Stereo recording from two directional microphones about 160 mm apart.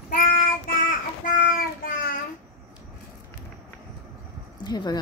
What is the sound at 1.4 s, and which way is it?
Child singing, 60° left (ahead or behind).